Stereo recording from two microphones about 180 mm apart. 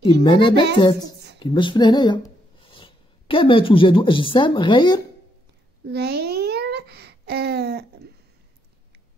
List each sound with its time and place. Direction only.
0.0 s a child's voice: 25° left (ahead or behind)
5.9 s babbling: 65° right (ahead or behind)